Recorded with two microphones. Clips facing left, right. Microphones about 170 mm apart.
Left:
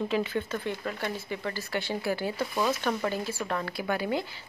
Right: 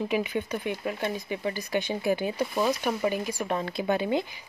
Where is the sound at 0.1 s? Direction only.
15° right (ahead or behind).